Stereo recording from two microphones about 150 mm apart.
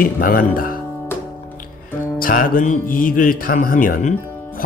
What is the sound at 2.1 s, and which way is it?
Speech, 70° left (ahead or behind).